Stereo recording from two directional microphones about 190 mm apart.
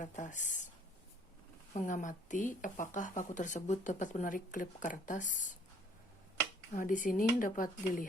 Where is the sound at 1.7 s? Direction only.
40° left (ahead or behind).